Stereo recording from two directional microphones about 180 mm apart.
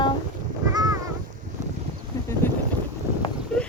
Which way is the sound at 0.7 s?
20° right (ahead or behind).